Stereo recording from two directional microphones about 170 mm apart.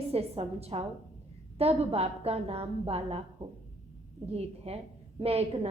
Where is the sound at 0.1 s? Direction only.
35° right (ahead or behind).